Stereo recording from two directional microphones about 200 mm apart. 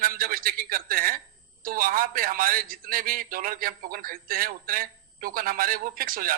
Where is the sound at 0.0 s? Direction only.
45° right (ahead or behind).